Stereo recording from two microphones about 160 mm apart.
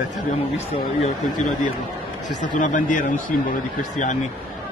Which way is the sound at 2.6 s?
55° left (ahead or behind).